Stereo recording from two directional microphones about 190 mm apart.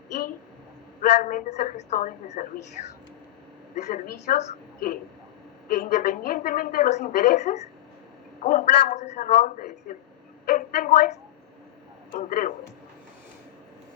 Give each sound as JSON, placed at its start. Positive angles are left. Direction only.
{"t": 1.2, "sound": "a woman's voice", "side_deg": 45}
{"t": 3.9, "sound": "a woman's voice", "side_deg": 45}
{"t": 12.1, "sound": "a woman's voice", "side_deg": 45}